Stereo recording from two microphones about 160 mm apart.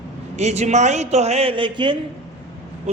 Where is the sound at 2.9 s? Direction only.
45° right (ahead or behind).